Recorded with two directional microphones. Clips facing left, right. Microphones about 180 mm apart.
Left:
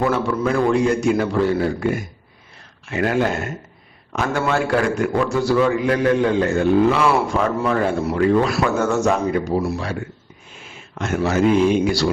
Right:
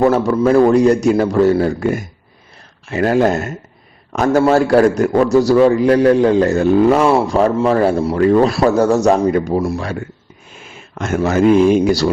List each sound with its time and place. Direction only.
0.0 s a man's voice: 40° right (ahead or behind)
10.9 s speech: 45° right (ahead or behind)